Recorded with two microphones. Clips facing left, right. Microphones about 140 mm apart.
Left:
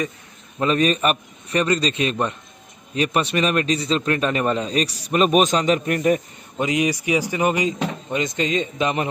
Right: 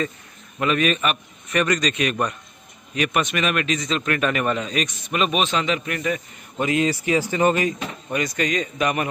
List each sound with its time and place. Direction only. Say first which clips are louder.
0.6 s a man's voice: left 2 dB; 35° left (ahead or behind)
6.6 s speech: even; 15° left (ahead or behind)